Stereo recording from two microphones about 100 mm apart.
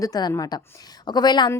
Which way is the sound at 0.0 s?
40° left (ahead or behind).